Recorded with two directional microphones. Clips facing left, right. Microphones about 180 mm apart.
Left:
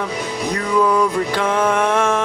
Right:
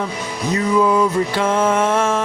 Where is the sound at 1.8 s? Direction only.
20° right (ahead or behind).